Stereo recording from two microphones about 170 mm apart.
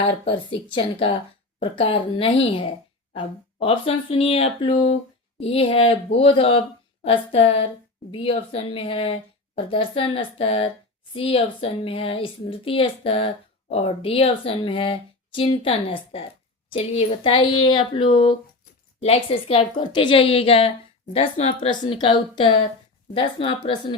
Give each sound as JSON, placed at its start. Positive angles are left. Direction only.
{"t": 0.0, "sound": "speech", "side_deg": 35}